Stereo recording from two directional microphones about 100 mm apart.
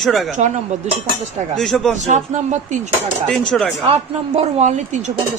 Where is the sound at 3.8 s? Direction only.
90° right.